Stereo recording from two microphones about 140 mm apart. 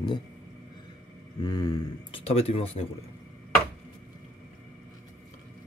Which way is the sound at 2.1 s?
45° left (ahead or behind).